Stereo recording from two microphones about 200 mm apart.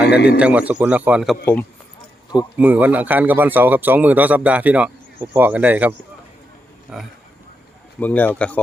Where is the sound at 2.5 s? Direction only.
10° right (ahead or behind).